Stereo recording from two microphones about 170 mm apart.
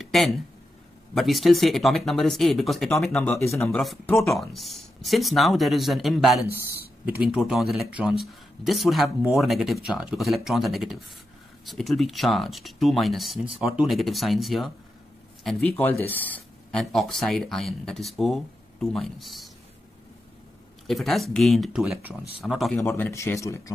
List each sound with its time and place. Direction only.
0.0 s a sound: centre (ahead or behind)
1.1 s speech: centre (ahead or behind)
20.8 s speech: centre (ahead or behind)
22.8 s speech: 15° left (ahead or behind)